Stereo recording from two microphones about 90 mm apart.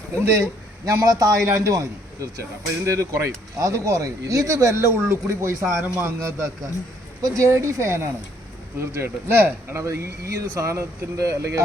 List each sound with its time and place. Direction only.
0.9 s speech: 40° right (ahead or behind)